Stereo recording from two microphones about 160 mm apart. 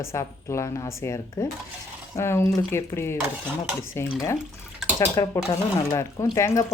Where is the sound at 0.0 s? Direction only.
15° left (ahead or behind).